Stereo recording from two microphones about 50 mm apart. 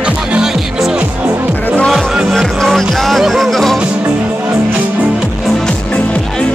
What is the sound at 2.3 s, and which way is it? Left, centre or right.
Music, centre.